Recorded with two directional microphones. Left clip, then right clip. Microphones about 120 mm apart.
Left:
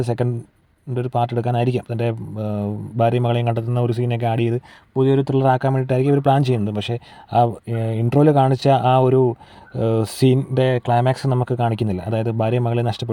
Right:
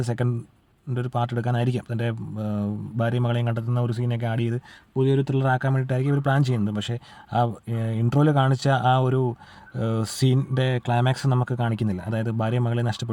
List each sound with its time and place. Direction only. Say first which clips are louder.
0.0 s speech: left 6 dB; 10° left (ahead or behind)
3.0 s speech: left 8 dB; 20° left (ahead or behind); by 11.4 s 5° left (ahead or behind)
11.4 s speech: left 7 dB; 20° left (ahead or behind)